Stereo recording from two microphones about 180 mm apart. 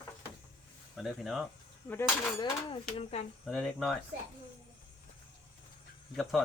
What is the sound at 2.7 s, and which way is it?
Speech, 35° left (ahead or behind).